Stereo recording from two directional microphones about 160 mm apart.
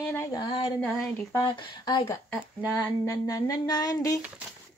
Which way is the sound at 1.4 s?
30° left (ahead or behind).